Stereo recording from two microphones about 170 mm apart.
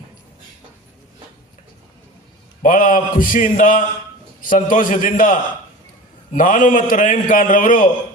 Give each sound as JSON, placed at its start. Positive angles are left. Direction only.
{"t": 2.6, "sound": "a man's voice", "side_deg": 50}